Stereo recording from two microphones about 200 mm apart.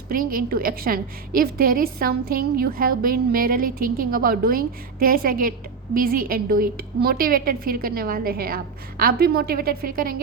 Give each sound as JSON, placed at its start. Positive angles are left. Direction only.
{"t": 0.1, "sound": "a woman's voice", "side_deg": -45}